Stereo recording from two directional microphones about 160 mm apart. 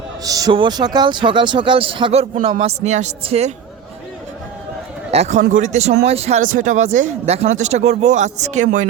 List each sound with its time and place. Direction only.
0.3 s a man's voice: 20° right (ahead or behind); by 3.5 s 45° right (ahead or behind)
5.1 s speech: 45° right (ahead or behind)